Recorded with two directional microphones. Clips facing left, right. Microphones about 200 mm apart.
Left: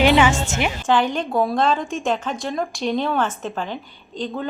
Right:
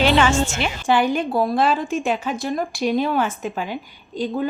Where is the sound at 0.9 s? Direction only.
10° right (ahead or behind).